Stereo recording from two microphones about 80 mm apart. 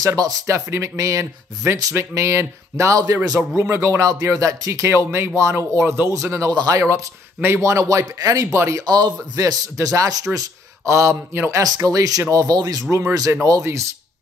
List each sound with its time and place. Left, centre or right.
0.0 s speech: right
6.5 s speech: right
7.6 s speech: right
8.8 s speech: right
9.4 s speech: right
11.6 s speech: right
12.9 s speech: right
13.3 s speech: right